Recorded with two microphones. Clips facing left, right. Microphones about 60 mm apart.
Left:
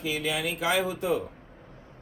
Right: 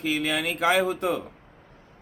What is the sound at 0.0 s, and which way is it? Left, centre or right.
A man's voice, right.